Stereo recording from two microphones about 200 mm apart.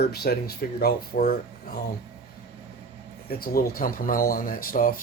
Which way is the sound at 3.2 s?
45° left (ahead or behind).